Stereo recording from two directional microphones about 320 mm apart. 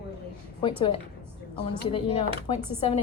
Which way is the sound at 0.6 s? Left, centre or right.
Centre.